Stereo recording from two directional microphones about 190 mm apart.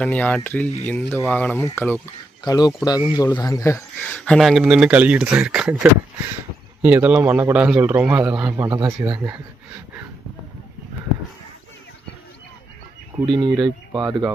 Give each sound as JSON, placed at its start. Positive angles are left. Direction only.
{"t": 0.0, "sound": "speech", "side_deg": 5}
{"t": 2.4, "sound": "a man's voice", "side_deg": 20}
{"t": 13.2, "sound": "speech", "side_deg": -25}